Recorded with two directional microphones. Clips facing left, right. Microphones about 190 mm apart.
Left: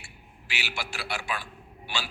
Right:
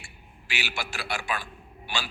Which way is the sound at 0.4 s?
50° right (ahead or behind).